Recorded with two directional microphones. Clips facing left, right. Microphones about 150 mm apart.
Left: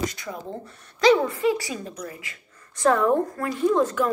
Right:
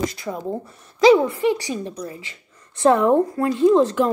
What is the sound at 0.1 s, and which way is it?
Speech, 35° right (ahead or behind).